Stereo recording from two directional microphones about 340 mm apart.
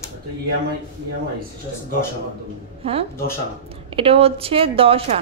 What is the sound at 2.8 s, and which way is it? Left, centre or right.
A woman's voice, centre.